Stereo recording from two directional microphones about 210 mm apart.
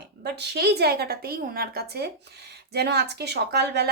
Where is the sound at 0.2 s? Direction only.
50° right (ahead or behind).